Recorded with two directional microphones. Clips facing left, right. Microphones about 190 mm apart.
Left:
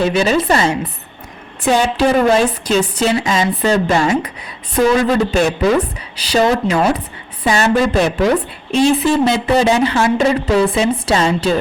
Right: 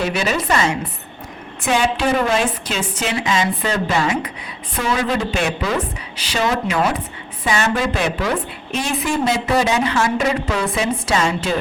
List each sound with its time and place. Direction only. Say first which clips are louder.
0.0 s a woman's voice: left 6 dB; 30° left (ahead or behind)